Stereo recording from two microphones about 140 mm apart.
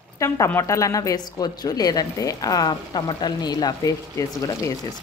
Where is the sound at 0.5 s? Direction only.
20° left (ahead or behind).